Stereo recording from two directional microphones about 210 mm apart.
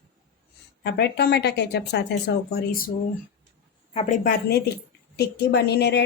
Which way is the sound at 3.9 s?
30° left (ahead or behind).